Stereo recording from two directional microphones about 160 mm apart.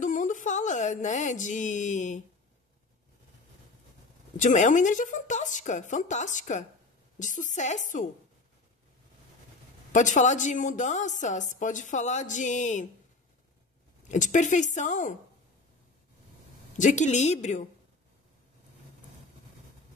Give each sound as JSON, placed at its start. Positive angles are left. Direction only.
{"t": 0.0, "sound": "music", "side_deg": 55}
{"t": 4.4, "sound": "a woman's voice", "side_deg": 50}
{"t": 9.9, "sound": "a woman's voice", "side_deg": 50}
{"t": 14.0, "sound": "a woman's voice", "side_deg": 50}
{"t": 16.7, "sound": "a woman's voice", "side_deg": 50}